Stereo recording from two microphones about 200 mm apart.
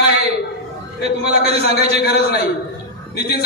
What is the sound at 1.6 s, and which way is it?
Speech, 55° left (ahead or behind).